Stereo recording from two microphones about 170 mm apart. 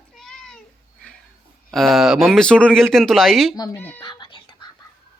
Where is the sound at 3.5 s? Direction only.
20° left (ahead or behind).